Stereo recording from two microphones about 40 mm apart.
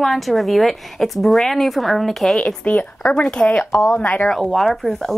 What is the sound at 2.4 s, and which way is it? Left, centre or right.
Speech, left.